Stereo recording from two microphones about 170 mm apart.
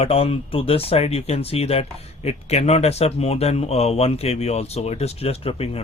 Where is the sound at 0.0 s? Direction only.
35° left (ahead or behind).